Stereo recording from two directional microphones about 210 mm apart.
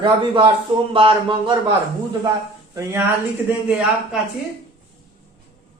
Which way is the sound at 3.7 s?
5° right (ahead or behind).